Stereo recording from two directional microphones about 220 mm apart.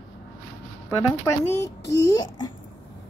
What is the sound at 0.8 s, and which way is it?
A child's voice, 10° left (ahead or behind).